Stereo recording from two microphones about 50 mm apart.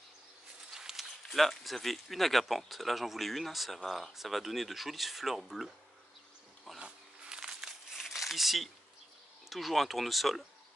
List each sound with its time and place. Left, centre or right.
0.7 s a sound: centre
1.3 s speech: centre
6.8 s crumpling: centre
9.5 s speech: centre